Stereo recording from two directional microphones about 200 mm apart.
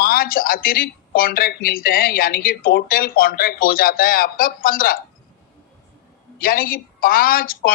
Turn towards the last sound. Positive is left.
turn(degrees=45)  # may be behind; listen again after turning